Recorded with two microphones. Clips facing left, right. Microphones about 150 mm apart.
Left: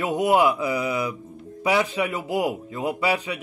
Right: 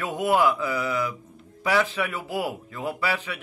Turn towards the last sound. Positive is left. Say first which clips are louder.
# left 4 dB
turn(degrees=15)  # may be behind; listen again after turning